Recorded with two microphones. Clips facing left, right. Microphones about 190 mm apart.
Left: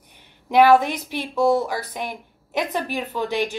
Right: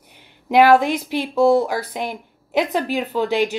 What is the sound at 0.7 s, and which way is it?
Speech, 10° right (ahead or behind).